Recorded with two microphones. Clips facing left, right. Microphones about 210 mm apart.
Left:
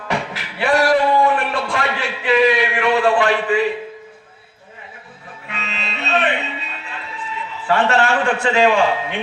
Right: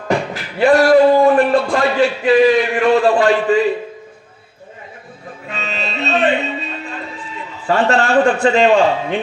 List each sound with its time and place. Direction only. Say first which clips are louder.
0.1 s beatboxing: right 5 dB; 45° right (ahead or behind)
5.6 s music: right 6 dB; 45° right (ahead or behind)
7.7 s a man's voice: right 2 dB; 45° right (ahead or behind)